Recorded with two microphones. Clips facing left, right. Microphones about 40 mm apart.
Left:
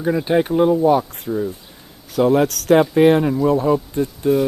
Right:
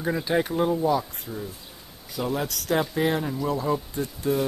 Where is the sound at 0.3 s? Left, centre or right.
Left.